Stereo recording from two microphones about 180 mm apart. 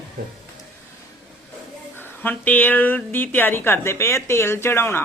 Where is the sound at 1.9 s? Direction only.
10° left (ahead or behind).